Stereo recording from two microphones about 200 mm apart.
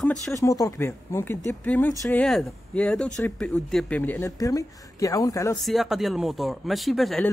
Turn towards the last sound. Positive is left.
turn(degrees=0)  # may be behind; listen again after turning